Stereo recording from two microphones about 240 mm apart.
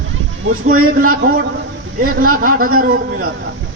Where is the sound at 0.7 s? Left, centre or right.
Right.